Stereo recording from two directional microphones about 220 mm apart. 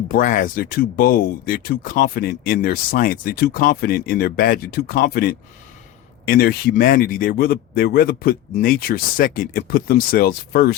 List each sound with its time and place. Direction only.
0.1 s speech: 35° left (ahead or behind)